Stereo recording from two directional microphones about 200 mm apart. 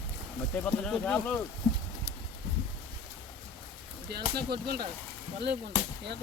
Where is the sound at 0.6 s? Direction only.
5° left (ahead or behind).